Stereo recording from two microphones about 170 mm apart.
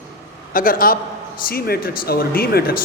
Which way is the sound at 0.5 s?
55° left (ahead or behind).